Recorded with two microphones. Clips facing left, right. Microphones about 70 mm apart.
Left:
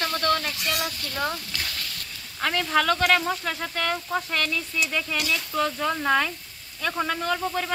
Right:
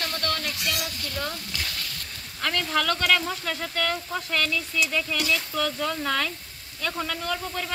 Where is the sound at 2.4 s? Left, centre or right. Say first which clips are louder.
Left 3 dB; centre.